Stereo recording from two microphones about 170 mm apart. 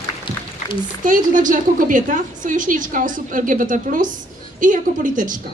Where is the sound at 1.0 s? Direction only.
50° right (ahead or behind).